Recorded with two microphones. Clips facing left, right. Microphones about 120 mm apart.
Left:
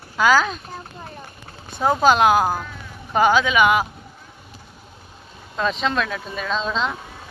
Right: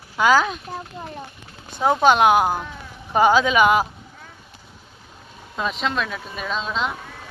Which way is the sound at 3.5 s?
40° right (ahead or behind).